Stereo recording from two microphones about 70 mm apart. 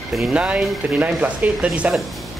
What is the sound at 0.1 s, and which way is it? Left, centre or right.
Speech, centre.